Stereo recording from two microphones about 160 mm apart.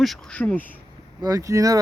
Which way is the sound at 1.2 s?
20° right (ahead or behind).